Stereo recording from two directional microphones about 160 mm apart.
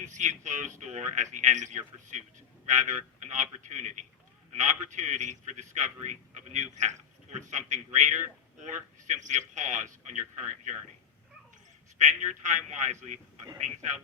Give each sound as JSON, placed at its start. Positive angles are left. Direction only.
{"t": 0.0, "sound": "a man's voice", "side_deg": -50}
{"t": 11.9, "sound": "a man's voice", "side_deg": -50}